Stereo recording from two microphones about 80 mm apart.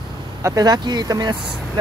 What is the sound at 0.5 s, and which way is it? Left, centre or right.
Speech, right.